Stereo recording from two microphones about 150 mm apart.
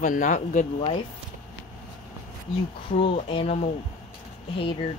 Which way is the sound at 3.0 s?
35° left (ahead or behind).